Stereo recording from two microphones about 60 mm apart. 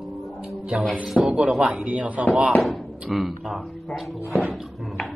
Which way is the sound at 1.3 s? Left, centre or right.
Right.